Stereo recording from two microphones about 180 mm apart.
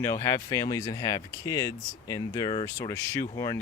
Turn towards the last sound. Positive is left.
turn(degrees=20)  # may be behind; listen again after turning